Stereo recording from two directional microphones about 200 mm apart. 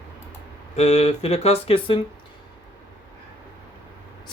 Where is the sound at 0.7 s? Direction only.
35° left (ahead or behind).